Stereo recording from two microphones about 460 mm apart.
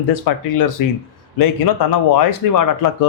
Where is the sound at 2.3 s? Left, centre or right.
Left.